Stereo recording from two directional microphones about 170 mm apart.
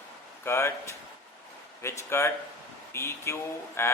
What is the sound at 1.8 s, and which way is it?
A man's voice, 15° left (ahead or behind).